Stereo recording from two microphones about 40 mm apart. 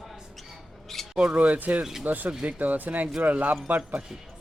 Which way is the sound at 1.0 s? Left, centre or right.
Centre.